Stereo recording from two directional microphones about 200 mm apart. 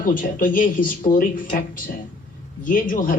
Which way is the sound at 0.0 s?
45° left (ahead or behind).